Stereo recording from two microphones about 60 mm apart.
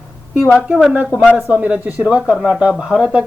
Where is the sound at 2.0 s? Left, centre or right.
Centre.